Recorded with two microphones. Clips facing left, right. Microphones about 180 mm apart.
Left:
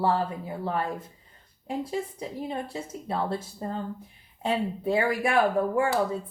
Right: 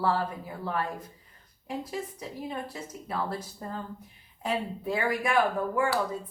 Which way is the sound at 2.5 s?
30° left (ahead or behind).